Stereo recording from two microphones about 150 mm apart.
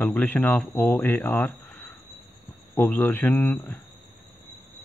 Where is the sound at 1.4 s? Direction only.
15° left (ahead or behind).